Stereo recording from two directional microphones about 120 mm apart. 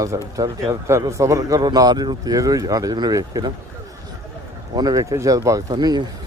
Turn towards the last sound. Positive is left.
turn(degrees=-35)  # may be behind; listen again after turning